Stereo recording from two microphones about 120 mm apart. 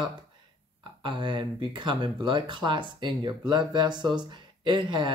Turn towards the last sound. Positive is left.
turn(degrees=-40)  # may be behind; listen again after turning